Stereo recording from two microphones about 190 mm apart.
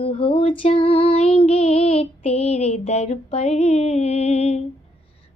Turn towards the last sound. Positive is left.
turn(degrees=35)  # may be behind; listen again after turning